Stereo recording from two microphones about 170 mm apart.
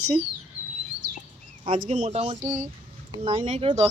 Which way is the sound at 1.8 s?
45° right (ahead or behind).